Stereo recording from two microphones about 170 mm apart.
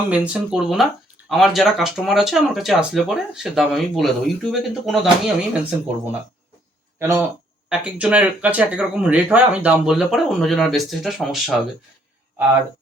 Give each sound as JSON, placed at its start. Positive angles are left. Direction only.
{"t": 0.1, "sound": "speech", "side_deg": -5}
{"t": 7.0, "sound": "speech", "side_deg": -15}